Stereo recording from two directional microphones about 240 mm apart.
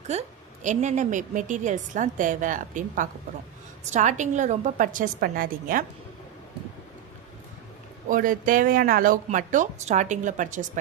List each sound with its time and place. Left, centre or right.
0.1 s a woman's voice: right
8.1 s a woman's voice: right